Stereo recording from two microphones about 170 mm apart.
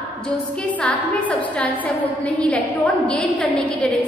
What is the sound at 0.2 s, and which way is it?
A woman's voice, 5° left (ahead or behind).